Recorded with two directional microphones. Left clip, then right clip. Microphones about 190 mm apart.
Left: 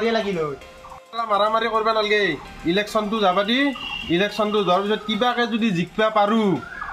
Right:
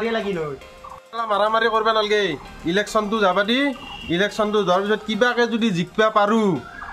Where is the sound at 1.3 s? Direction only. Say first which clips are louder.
Right 1 dB; 20° right (ahead or behind).